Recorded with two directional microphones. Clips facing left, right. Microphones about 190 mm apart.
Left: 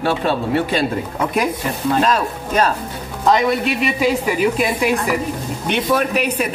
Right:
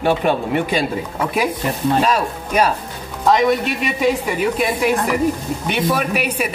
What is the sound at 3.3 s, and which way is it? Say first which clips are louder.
Speech: right 1 dB; centre (ahead or behind).